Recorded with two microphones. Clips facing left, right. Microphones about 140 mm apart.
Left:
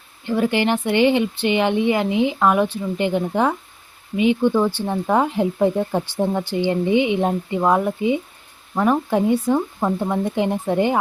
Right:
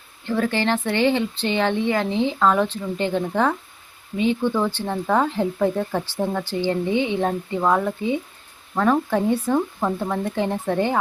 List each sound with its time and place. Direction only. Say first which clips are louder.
0.3 s speech: left 3 dB; 15° left (ahead or behind)